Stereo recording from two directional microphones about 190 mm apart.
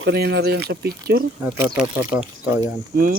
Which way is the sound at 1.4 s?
15° right (ahead or behind).